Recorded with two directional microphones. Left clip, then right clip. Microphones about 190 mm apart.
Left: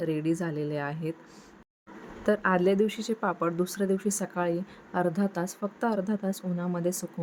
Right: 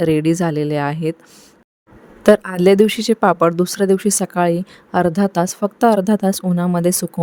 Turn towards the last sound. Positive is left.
turn(degrees=-55)  # may be behind; listen again after turning